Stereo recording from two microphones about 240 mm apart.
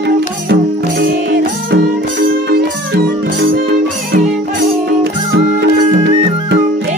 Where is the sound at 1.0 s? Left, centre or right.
Right.